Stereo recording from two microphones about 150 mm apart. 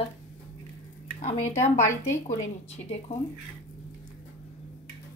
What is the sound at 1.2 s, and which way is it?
A woman's voice, 50° left (ahead or behind).